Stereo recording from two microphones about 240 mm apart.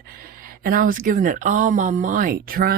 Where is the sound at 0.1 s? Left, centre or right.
Right.